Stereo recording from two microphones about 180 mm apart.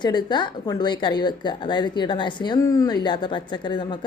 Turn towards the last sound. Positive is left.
turn(degrees=25)  # may be behind; listen again after turning